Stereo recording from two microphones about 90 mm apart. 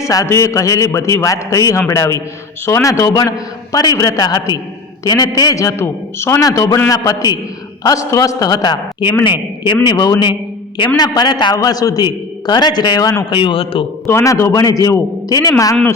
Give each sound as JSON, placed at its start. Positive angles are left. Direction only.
{"t": 0.0, "sound": "a man's voice", "side_deg": 40}
{"t": 6.4, "sound": "a man's voice", "side_deg": 40}
{"t": 9.8, "sound": "a man's voice", "side_deg": 50}
{"t": 11.5, "sound": "a man's voice", "side_deg": 45}
{"t": 13.4, "sound": "a man's voice", "side_deg": 80}
{"t": 14.1, "sound": "a man's voice", "side_deg": 30}